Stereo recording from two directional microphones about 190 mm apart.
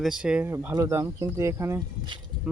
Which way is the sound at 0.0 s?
5° right (ahead or behind).